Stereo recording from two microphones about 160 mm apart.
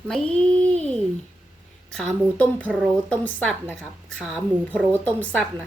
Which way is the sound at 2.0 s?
5° left (ahead or behind).